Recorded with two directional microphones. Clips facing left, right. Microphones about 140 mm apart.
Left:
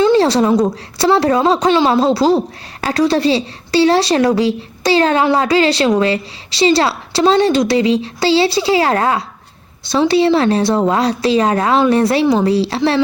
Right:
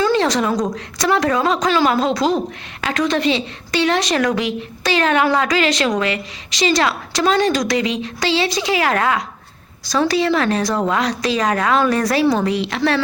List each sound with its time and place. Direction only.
0.0 s a sound: 30° left (ahead or behind)
0.9 s speech: 30° left (ahead or behind)
12.5 s speech: 30° left (ahead or behind)